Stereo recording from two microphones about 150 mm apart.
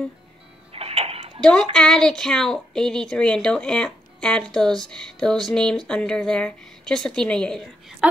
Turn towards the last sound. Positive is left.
turn(degrees=5)  # may be behind; listen again after turning